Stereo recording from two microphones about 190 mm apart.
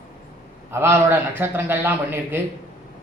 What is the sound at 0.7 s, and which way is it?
A man's voice, 15° right (ahead or behind).